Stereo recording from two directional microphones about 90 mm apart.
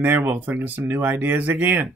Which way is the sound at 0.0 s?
20° right (ahead or behind).